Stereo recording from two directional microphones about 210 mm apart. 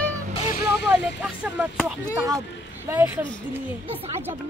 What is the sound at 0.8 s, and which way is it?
Speech, 5° right (ahead or behind).